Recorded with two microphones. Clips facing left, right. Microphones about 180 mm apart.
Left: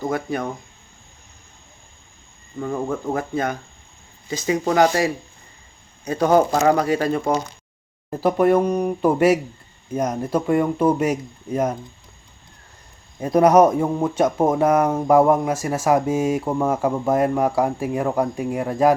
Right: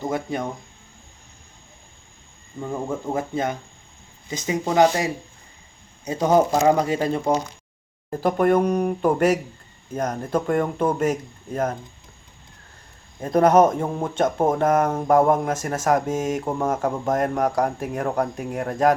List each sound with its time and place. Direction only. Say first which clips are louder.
0.1 s speech: left 2 dB; 20° right (ahead or behind)
2.6 s speech: left 3 dB; 15° right (ahead or behind)
8.1 s speech: left 2 dB; 5° left (ahead or behind)
13.1 s speech: left 2 dB; 10° left (ahead or behind)